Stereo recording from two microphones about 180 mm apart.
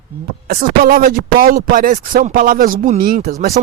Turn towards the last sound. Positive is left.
turn(degrees=-50)  # may be behind; listen again after turning